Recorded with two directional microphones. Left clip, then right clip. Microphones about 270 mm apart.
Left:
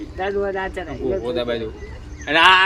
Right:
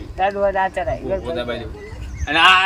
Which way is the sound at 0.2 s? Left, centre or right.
Centre.